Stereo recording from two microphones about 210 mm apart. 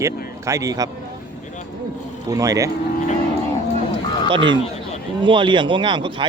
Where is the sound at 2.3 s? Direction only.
15° right (ahead or behind).